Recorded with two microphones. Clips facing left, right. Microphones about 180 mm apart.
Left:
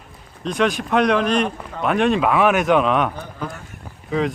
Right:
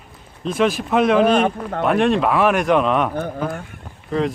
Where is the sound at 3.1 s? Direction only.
55° right (ahead or behind).